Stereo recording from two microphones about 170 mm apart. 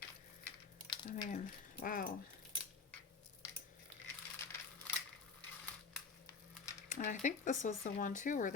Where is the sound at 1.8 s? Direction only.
55° left (ahead or behind).